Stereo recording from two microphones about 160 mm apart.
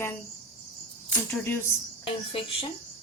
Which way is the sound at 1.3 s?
15° left (ahead or behind).